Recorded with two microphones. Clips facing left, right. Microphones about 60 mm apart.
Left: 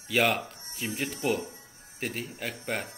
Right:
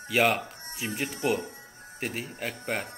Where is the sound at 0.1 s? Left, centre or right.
Centre.